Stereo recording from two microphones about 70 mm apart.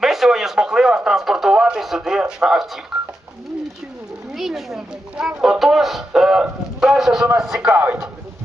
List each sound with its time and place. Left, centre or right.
0.0 s radio: centre
2.0 s speech: centre
4.4 s a man's voice: centre
7.7 s speech: right